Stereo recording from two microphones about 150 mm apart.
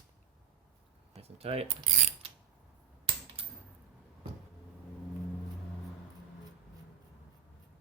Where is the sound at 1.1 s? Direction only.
40° right (ahead or behind).